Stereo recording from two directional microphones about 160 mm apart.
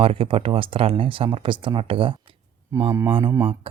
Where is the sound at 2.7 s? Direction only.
15° right (ahead or behind).